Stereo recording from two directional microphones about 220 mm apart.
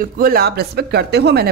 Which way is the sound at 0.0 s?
40° right (ahead or behind).